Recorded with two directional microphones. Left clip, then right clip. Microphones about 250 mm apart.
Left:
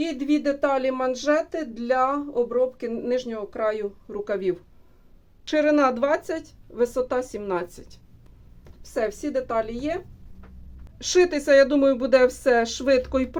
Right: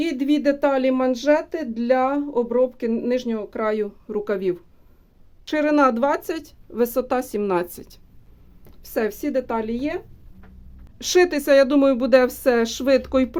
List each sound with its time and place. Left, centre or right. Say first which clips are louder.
0.0 s speech: right 3 dB; right